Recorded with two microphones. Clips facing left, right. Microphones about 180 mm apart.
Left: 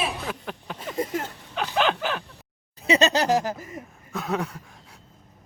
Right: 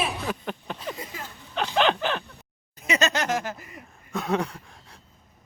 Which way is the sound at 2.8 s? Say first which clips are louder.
Left 4 dB; 30° left (ahead or behind).